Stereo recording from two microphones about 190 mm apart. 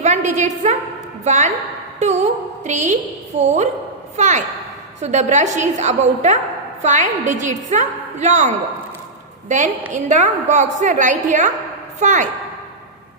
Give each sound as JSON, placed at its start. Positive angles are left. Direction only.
{"t": 0.0, "sound": "a woman's voice", "side_deg": -40}